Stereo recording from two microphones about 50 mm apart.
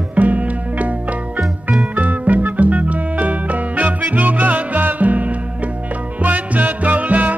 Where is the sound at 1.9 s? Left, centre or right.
Right.